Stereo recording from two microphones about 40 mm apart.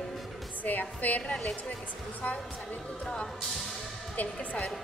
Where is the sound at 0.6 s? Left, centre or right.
Left.